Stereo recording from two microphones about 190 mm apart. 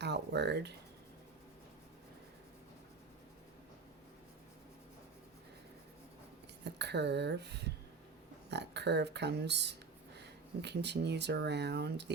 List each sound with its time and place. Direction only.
0.0 s speech: 65° right (ahead or behind)
6.7 s speech: 65° right (ahead or behind)